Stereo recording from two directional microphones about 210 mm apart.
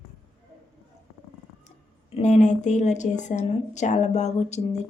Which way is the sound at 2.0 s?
30° left (ahead or behind).